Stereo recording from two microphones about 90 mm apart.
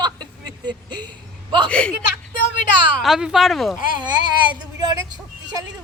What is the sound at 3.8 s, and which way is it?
Speech, 60° right (ahead or behind).